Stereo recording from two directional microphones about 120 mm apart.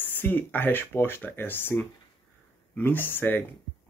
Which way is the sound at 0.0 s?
15° left (ahead or behind).